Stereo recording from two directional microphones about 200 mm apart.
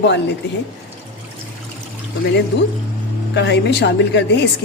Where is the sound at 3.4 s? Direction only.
60° left (ahead or behind).